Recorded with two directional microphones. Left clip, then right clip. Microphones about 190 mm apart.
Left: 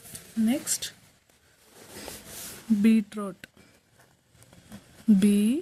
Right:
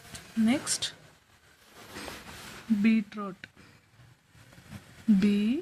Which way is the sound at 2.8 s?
45° left (ahead or behind).